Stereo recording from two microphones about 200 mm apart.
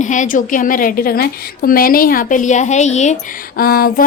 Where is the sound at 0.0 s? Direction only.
40° left (ahead or behind).